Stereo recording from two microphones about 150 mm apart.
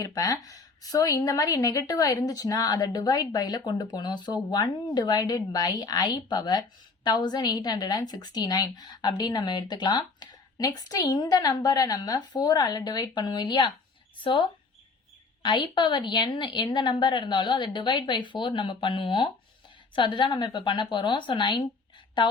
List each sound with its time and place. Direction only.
0.0 s a woman's voice: 25° left (ahead or behind)
15.4 s a woman's voice: 30° left (ahead or behind)